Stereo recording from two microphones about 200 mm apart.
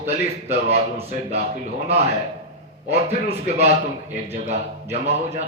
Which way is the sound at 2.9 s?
30° right (ahead or behind).